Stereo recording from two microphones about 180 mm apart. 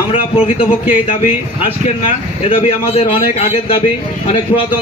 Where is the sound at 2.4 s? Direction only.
30° left (ahead or behind).